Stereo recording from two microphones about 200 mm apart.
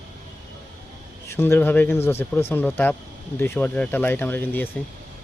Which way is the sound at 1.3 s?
10° left (ahead or behind).